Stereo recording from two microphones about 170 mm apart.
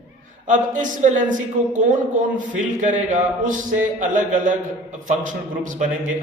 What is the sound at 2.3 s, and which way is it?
A man's voice, 45° right (ahead or behind).